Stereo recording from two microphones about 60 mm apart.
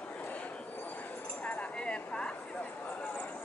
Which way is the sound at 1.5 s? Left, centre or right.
Centre.